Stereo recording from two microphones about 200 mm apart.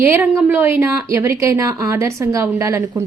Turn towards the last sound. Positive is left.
turn(degrees=-15)  # may be behind; listen again after turning